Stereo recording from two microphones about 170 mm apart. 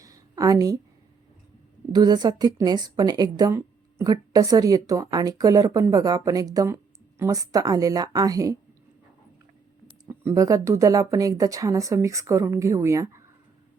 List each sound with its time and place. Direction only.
0.0 s a sound: 20° right (ahead or behind)
1.9 s a woman's voice: 25° right (ahead or behind)
10.1 s a woman's voice: 15° right (ahead or behind)